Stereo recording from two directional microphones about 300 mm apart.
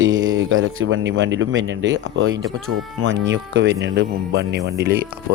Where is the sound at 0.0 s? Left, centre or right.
Right.